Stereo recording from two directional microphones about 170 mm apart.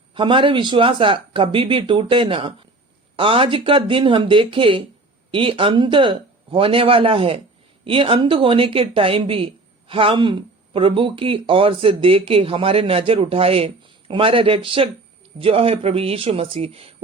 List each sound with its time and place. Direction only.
0.1 s speech: 30° right (ahead or behind)